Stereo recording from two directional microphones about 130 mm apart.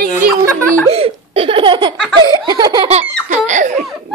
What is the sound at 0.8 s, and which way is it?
Laughter, 50° right (ahead or behind).